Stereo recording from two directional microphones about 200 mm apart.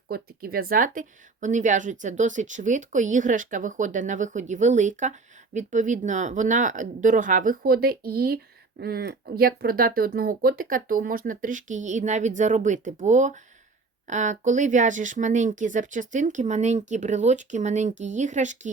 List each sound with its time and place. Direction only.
0.1 s speech: 50° right (ahead or behind)